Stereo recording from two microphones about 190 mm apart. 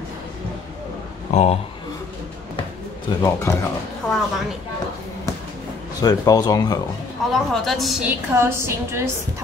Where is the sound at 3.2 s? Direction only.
15° left (ahead or behind).